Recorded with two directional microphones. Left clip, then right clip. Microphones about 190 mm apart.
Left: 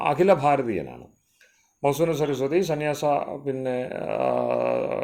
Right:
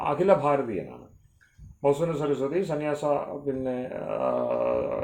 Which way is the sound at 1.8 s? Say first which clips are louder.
Left 2 dB; 45° left (ahead or behind).